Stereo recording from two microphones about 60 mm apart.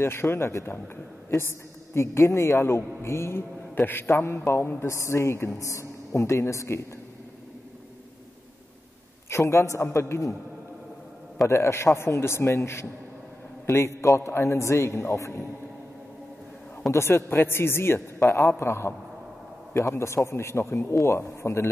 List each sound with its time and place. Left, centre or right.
0.0 s a man's voice: left
2.0 s a man's voice: left
3.7 s a man's voice: left
4.1 s a man's voice: left
9.3 s a man's voice: left
11.4 s a man's voice: left
16.9 s a man's voice: left